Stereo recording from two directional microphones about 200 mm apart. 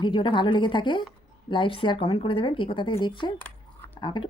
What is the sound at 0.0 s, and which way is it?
Speech, 25° left (ahead or behind).